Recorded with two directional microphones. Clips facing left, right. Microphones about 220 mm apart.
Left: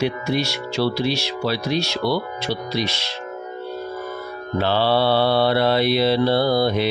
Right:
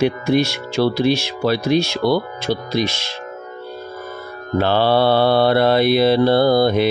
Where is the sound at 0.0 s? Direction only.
50° right (ahead or behind).